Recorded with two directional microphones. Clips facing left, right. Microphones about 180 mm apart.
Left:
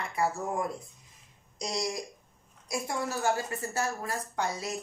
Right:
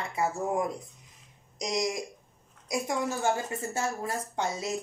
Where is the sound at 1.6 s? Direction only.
20° right (ahead or behind).